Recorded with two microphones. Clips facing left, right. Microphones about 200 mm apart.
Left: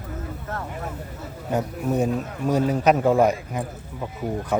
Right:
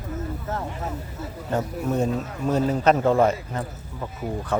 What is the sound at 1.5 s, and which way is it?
A man's voice, 10° left (ahead or behind).